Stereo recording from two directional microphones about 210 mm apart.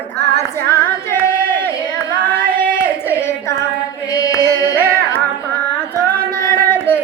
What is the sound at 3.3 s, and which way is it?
Female singing, 15° left (ahead or behind).